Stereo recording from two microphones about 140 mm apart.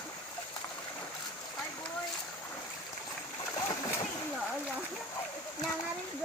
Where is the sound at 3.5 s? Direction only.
25° left (ahead or behind).